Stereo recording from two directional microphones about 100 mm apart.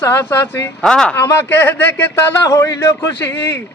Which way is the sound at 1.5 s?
20° left (ahead or behind).